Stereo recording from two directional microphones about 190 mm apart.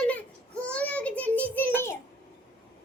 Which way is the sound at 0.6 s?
5° left (ahead or behind).